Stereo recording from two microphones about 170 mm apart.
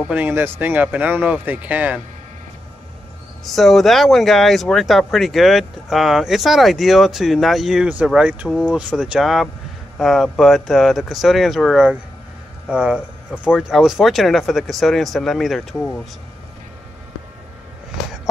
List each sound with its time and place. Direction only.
0.1 s speech: 10° right (ahead or behind)
3.4 s speech: centre (ahead or behind)